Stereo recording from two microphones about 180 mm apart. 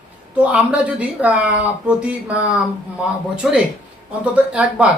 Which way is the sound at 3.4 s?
5° right (ahead or behind).